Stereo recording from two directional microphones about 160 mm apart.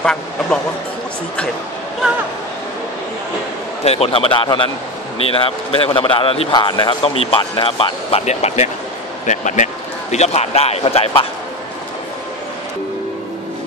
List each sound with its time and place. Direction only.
0.0 s speech: 5° left (ahead or behind)
3.8 s speech: 40° left (ahead or behind)